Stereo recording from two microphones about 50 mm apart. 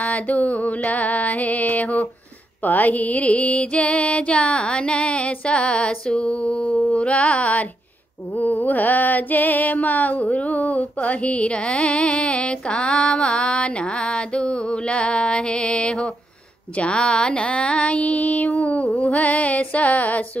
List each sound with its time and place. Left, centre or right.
0.0 s music: left